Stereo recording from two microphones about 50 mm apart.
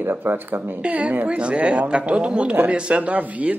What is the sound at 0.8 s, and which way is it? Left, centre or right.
Speech, right.